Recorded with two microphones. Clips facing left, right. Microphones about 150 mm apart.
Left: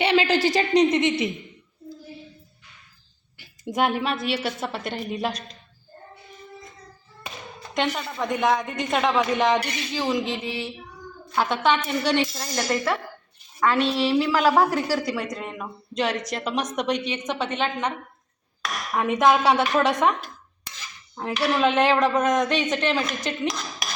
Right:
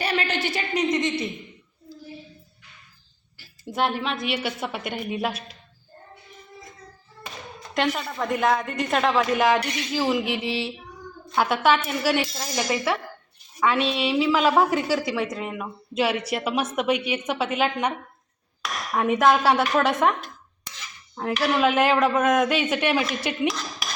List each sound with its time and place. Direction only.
0.0 s a sound: 25° left (ahead or behind)
0.5 s speech: 35° left (ahead or behind)
3.4 s a sound: 15° left (ahead or behind)
4.0 s a woman's voice: 5° left (ahead or behind)
7.8 s a woman's voice: centre (ahead or behind)
10.2 s a sound: 70° right (ahead or behind)
11.3 s a woman's voice: 5° right (ahead or behind)
18.9 s a woman's voice: centre (ahead or behind)
21.2 s a woman's voice: centre (ahead or behind)